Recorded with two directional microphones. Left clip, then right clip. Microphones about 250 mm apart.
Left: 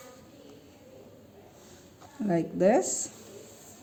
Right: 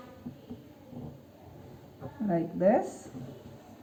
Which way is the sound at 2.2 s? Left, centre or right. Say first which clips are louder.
Left 2 dB; left.